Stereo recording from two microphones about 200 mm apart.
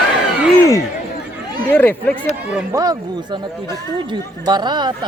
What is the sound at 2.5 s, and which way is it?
Speech, 5° right (ahead or behind).